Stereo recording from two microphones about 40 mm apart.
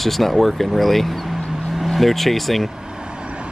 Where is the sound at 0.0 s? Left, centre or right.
Centre.